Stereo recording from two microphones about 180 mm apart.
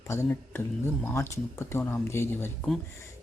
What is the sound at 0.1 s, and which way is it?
Speech, 15° left (ahead or behind).